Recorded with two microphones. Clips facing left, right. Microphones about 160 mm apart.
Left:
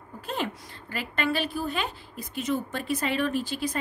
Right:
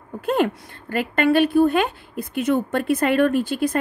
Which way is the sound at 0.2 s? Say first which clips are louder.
Right 11 dB; 55° right (ahead or behind).